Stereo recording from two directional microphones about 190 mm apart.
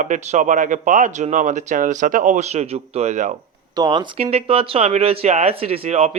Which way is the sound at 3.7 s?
20° right (ahead or behind).